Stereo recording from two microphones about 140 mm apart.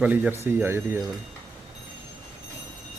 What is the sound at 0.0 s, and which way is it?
Speech, 10° right (ahead or behind).